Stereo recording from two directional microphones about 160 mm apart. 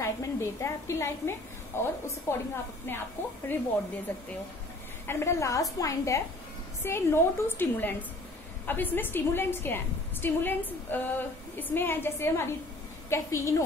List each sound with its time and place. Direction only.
0.0 s a woman's voice: 15° left (ahead or behind)
5.0 s a woman's voice: 15° left (ahead or behind)